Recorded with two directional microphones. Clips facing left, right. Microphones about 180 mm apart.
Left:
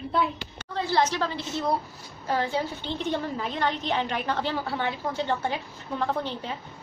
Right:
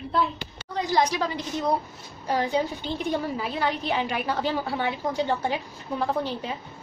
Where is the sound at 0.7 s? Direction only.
15° right (ahead or behind).